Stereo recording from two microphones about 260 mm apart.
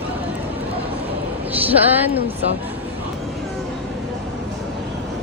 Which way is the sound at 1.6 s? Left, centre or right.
Centre.